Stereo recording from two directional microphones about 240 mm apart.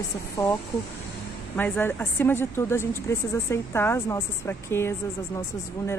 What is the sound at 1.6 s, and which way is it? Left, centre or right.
A woman's voice, centre.